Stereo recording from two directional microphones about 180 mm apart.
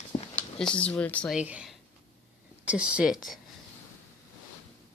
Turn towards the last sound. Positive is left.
turn(degrees=0)  # may be behind; listen again after turning